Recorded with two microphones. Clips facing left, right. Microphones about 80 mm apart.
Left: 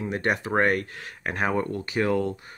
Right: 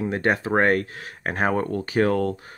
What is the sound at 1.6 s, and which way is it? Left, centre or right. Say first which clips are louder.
Speech: right 4 dB; right.